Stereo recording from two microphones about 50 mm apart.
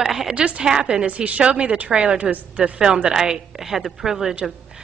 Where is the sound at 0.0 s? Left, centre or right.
Centre.